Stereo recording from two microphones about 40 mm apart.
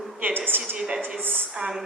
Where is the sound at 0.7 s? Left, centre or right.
Right.